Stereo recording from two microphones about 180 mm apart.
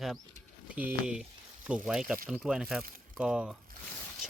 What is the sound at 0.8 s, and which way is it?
Speech, 5° right (ahead or behind).